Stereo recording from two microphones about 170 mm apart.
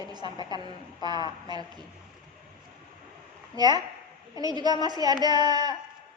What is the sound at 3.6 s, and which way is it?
A woman's voice, 25° right (ahead or behind).